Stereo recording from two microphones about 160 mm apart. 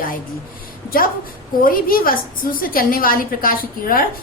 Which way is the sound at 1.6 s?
65° left (ahead or behind).